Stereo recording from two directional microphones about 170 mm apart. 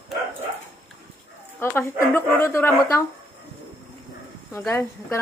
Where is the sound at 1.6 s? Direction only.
15° left (ahead or behind).